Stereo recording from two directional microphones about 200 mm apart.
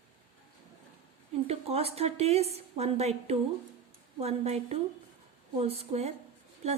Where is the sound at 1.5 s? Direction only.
30° right (ahead or behind).